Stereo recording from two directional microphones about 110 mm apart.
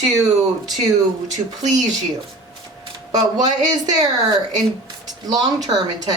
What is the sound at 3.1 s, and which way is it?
Speech, 40° right (ahead or behind).